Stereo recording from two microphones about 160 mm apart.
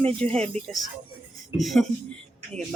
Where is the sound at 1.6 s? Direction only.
Centre (ahead or behind).